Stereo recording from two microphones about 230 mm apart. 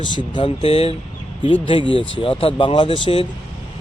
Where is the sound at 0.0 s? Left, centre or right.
Left.